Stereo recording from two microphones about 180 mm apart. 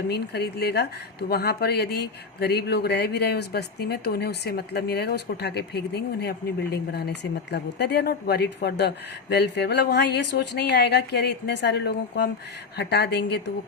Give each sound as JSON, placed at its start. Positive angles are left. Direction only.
{"t": 0.1, "sound": "speech", "side_deg": 65}